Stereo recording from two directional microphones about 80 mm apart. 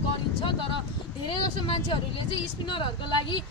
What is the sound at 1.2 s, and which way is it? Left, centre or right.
Speech, left.